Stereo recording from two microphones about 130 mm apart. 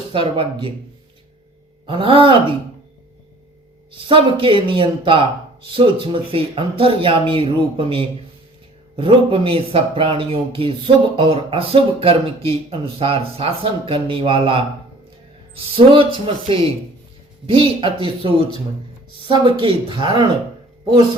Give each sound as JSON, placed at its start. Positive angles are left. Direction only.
{"t": 0.1, "sound": "speech", "side_deg": -40}
{"t": 1.9, "sound": "speech", "side_deg": -45}
{"t": 4.0, "sound": "speech", "side_deg": -40}
{"t": 15.7, "sound": "speech", "side_deg": -40}
{"t": 19.2, "sound": "speech", "side_deg": -45}